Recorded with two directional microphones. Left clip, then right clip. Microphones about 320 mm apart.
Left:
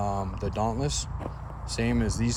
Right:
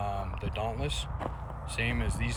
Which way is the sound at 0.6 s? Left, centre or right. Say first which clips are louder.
Left 5 dB; left.